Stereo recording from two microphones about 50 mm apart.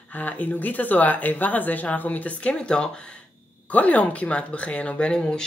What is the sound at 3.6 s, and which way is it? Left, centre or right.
Speech, left.